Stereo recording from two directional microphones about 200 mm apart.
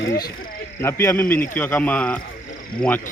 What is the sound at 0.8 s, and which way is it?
Speech, 15° left (ahead or behind).